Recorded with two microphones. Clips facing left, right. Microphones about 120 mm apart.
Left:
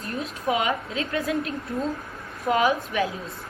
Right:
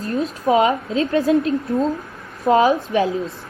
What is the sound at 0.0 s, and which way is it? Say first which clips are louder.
A woman's voice: right 8 dB; 35° right (ahead or behind).